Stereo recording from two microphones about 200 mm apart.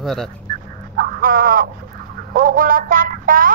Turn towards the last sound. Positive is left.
turn(degrees=-45)  # may be behind; listen again after turning